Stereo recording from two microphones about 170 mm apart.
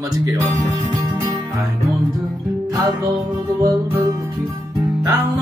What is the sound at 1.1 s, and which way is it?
Music, 10° right (ahead or behind).